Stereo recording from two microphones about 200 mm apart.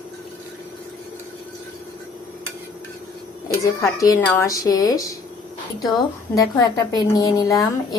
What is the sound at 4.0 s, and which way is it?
A woman's voice, 15° left (ahead or behind).